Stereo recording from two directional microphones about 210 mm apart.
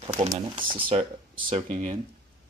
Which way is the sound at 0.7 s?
25° right (ahead or behind).